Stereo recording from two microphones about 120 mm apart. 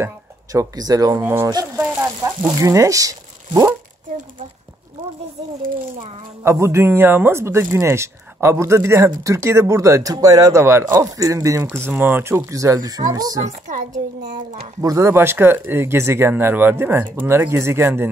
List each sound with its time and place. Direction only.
0.0 s speech: 30° right (ahead or behind)
1.2 s speech: 20° right (ahead or behind)
1.5 s speech: 30° right (ahead or behind)
6.4 s speech: 20° right (ahead or behind)
13.7 s a woman's voice: 90° right
14.8 s speech: 25° right (ahead or behind)